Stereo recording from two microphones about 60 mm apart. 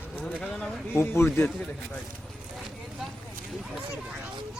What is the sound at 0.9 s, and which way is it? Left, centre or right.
Speech, left.